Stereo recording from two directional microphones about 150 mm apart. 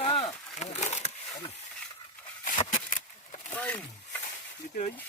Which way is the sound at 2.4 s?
60° left (ahead or behind).